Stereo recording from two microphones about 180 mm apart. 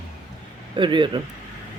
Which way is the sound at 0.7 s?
25° right (ahead or behind).